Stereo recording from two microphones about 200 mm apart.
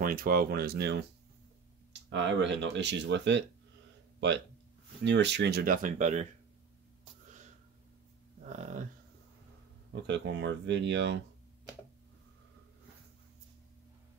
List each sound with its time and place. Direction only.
0.0 s speech: 45° right (ahead or behind)
5.0 s speech: 60° right (ahead or behind); by 6.2 s 35° right (ahead or behind)
10.0 s speech: 60° right (ahead or behind)